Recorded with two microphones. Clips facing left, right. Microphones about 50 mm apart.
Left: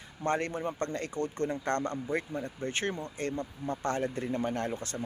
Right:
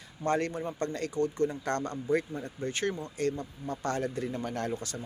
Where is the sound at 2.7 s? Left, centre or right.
Left.